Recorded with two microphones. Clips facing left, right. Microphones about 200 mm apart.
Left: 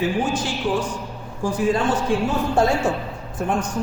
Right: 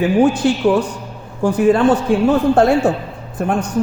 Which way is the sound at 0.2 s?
65° right (ahead or behind).